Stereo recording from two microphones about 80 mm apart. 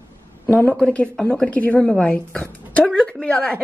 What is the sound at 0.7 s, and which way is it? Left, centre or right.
Speech, centre.